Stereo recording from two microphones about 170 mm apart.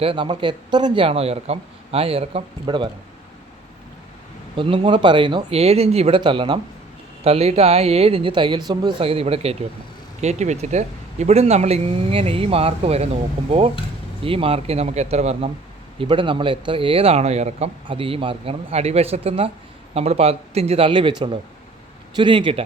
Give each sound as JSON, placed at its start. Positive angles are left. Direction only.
{"t": 0.0, "sound": "speech", "side_deg": -30}
{"t": 4.5, "sound": "speech", "side_deg": -30}
{"t": 14.2, "sound": "speech", "side_deg": -30}